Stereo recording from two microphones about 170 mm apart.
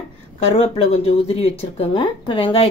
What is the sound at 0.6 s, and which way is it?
Speech, 35° left (ahead or behind).